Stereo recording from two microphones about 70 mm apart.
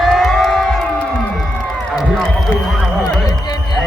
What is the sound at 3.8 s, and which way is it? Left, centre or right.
Music, centre.